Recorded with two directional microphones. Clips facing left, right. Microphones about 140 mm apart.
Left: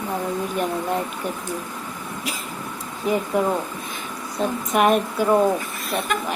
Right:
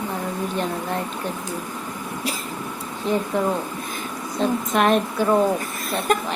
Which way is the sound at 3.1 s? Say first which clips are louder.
Even; 10° left (ahead or behind).